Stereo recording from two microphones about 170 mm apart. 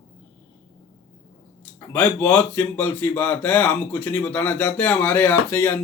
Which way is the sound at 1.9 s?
10° left (ahead or behind).